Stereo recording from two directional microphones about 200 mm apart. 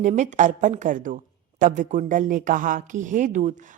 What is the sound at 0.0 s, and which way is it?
A woman's voice, 35° right (ahead or behind).